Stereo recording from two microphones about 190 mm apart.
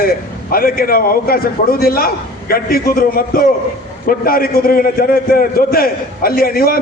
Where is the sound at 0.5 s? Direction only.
50° left (ahead or behind).